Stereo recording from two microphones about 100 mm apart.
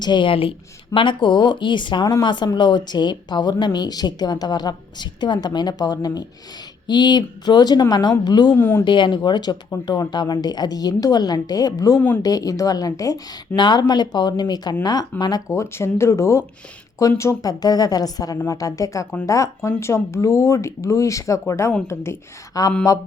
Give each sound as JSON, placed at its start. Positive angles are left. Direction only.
{"t": 0.0, "sound": "speech", "side_deg": 50}
{"t": 8.5, "sound": "speech", "side_deg": 20}
{"t": 8.8, "sound": "a woman's voice", "side_deg": 50}
{"t": 22.5, "sound": "a woman's voice", "side_deg": 35}